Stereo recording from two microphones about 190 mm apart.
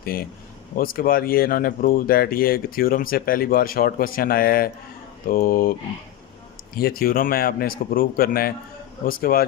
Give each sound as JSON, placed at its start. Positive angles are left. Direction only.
{"t": 0.0, "sound": "speech", "side_deg": 50}
{"t": 6.7, "sound": "speech", "side_deg": 50}